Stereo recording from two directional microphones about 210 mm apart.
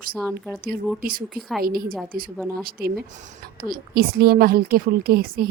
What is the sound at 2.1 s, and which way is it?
A woman's voice, 45° right (ahead or behind).